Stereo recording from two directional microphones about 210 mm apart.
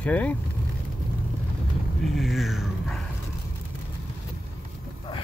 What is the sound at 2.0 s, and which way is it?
Speech, centre (ahead or behind).